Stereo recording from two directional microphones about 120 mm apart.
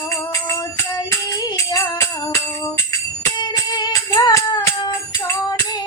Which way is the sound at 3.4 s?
35° left (ahead or behind).